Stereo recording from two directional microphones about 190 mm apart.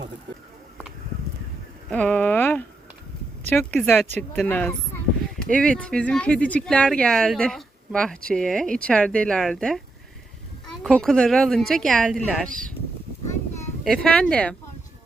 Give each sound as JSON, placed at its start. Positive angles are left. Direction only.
{"t": 1.9, "sound": "a sound", "side_deg": 5}
{"t": 3.5, "sound": "speech", "side_deg": 5}
{"t": 10.8, "sound": "speech", "side_deg": 0}
{"t": 12.5, "sound": "speech", "side_deg": -45}
{"t": 13.8, "sound": "speech", "side_deg": 0}